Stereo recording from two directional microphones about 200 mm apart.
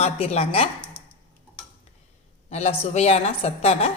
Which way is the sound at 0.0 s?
30° left (ahead or behind).